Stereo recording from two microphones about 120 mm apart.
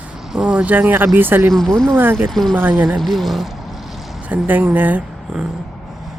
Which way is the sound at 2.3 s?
5° left (ahead or behind).